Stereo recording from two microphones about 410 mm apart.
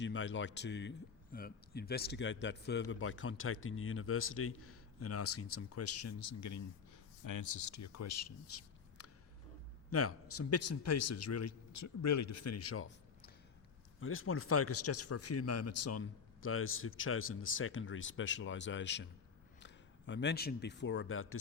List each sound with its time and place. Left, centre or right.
0.0 s a man's voice: left
9.0 s a sound: left
9.9 s speech: left